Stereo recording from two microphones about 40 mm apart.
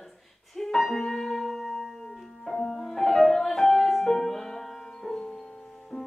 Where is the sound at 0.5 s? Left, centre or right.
Centre.